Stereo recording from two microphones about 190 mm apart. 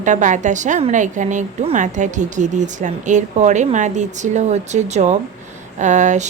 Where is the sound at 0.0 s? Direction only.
40° right (ahead or behind).